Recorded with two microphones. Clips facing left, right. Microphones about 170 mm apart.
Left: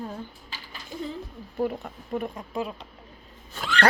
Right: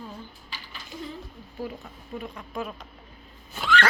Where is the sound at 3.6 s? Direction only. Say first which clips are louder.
Left 2 dB; 40° left (ahead or behind).